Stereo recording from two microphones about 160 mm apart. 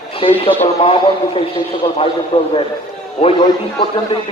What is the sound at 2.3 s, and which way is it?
A man's voice, 35° left (ahead or behind).